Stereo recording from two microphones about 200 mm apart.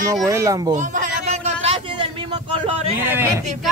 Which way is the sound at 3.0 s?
10° right (ahead or behind).